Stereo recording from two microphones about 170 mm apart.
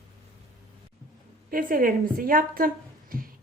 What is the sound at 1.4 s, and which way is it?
A woman's voice, 55° right (ahead or behind).